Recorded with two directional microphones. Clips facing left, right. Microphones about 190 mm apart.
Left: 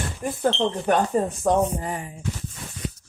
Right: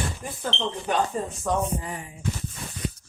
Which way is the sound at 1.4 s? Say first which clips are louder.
Left 3 dB; 50° left (ahead or behind).